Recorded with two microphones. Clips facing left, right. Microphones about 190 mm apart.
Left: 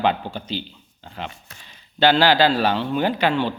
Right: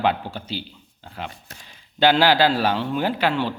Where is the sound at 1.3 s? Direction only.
45° right (ahead or behind).